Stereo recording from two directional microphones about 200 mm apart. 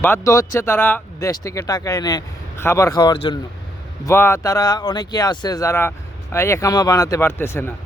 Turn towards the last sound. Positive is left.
turn(degrees=10)  # may be behind; listen again after turning